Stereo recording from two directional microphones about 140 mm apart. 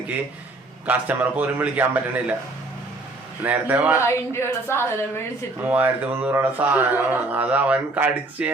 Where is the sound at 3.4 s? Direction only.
10° right (ahead or behind).